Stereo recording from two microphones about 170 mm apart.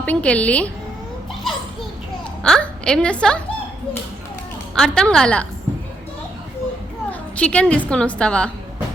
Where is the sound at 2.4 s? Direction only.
5° left (ahead or behind).